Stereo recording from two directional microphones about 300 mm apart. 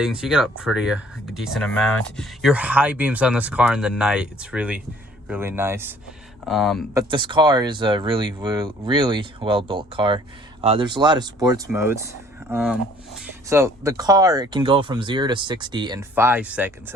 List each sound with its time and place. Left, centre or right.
0.0 s speech: centre
6.9 s speech: centre